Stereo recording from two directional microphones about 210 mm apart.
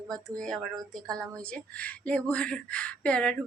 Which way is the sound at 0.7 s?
15° right (ahead or behind).